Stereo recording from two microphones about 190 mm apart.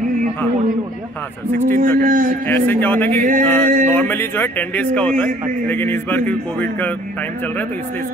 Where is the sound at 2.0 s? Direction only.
45° right (ahead or behind).